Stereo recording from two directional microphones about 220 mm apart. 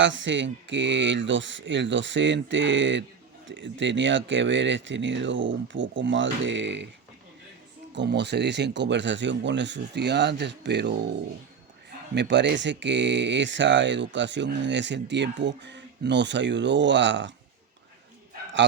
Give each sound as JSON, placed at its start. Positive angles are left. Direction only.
{"t": 0.0, "sound": "speech", "side_deg": -60}
{"t": 7.9, "sound": "speech", "side_deg": -50}
{"t": 12.1, "sound": "speech", "side_deg": -50}